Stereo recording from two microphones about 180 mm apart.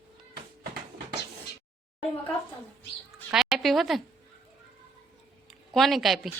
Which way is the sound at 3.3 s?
Centre (ahead or behind).